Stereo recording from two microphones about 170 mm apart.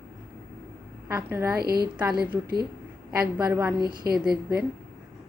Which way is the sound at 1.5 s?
65° right (ahead or behind).